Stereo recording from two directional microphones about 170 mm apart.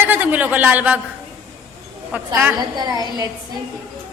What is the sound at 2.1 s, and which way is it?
Speech, 10° right (ahead or behind).